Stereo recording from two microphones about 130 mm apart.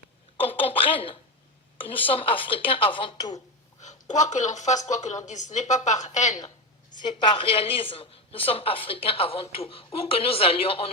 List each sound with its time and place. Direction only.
0.3 s a sound: 45° left (ahead or behind)
1.8 s speech: 45° left (ahead or behind)
3.8 s speech: 65° left (ahead or behind)
6.9 s a woman's voice: 35° left (ahead or behind)